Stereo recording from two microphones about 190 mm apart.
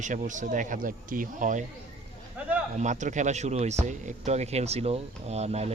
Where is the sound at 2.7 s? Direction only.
40° right (ahead or behind).